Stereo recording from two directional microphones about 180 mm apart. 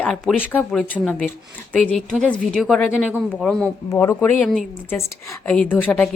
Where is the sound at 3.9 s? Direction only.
15° left (ahead or behind).